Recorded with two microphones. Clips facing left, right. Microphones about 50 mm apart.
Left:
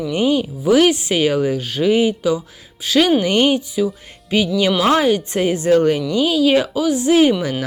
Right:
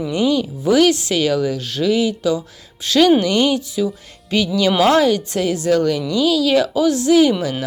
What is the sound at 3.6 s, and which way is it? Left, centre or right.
Speech, centre.